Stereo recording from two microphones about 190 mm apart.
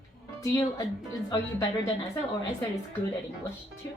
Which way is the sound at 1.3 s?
25° left (ahead or behind).